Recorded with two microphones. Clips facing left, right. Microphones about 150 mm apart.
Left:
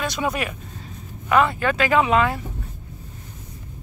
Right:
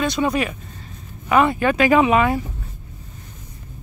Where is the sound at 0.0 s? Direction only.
Centre (ahead or behind).